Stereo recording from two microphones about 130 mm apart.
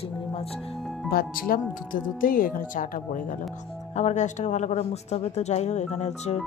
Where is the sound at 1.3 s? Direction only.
90° left.